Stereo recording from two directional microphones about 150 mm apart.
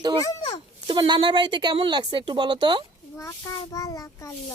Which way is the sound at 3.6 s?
25° left (ahead or behind).